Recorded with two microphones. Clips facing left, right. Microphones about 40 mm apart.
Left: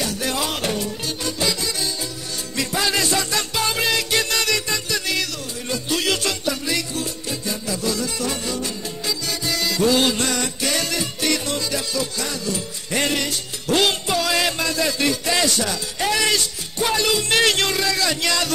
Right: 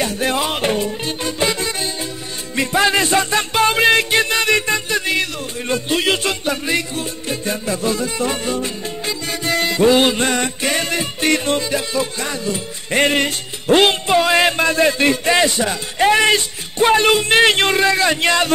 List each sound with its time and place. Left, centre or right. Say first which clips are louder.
0.0 s music: right 5 dB; right